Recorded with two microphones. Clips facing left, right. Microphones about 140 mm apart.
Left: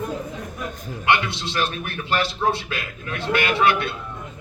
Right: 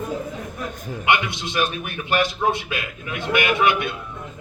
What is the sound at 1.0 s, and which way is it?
A man's voice, 15° right (ahead or behind).